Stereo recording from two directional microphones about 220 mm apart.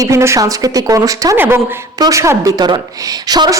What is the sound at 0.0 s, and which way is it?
A woman's voice, 15° right (ahead or behind).